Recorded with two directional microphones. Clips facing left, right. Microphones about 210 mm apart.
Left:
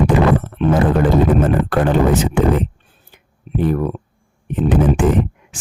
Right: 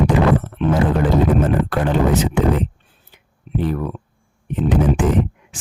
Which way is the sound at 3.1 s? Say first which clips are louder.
Left 3 dB; 50° left (ahead or behind).